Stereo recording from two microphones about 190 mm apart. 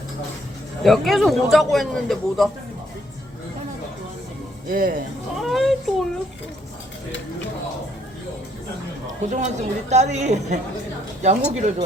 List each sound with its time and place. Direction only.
0.8 s a man's voice: centre (ahead or behind)
4.7 s speech: 50° right (ahead or behind)
5.4 s a man's voice: centre (ahead or behind)
9.3 s a woman's voice: 35° right (ahead or behind)